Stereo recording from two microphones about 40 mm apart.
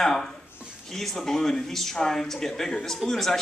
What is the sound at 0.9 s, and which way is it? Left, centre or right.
Speech, centre.